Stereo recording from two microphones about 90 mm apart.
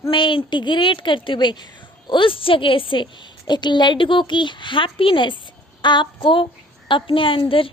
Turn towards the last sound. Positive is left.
turn(degrees=80)